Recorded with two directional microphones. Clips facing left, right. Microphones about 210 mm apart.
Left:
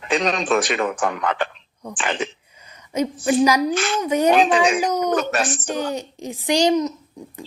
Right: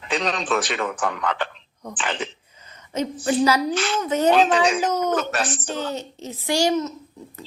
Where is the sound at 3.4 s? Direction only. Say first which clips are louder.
Left 2 dB; 15° left (ahead or behind).